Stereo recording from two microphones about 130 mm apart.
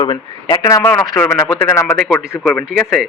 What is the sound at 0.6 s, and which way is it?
Speech, 20° left (ahead or behind).